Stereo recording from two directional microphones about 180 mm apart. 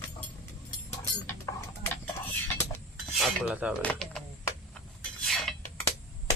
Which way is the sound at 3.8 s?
5° left (ahead or behind).